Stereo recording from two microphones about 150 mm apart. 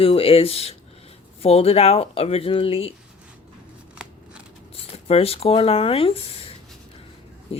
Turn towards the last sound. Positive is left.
turn(degrees=40)  # may be behind; listen again after turning